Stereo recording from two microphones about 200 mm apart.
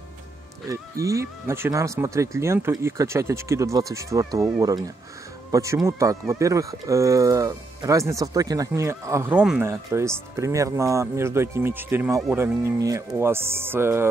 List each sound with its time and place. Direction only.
0.7 s speech: 15° right (ahead or behind)